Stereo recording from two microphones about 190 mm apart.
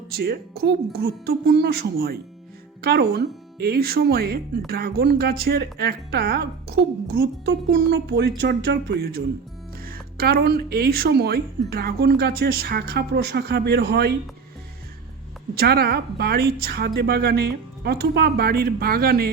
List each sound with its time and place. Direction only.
0.1 s speech: 55° right (ahead or behind)
7.1 s speech: 65° right (ahead or behind)
15.5 s speech: 55° right (ahead or behind)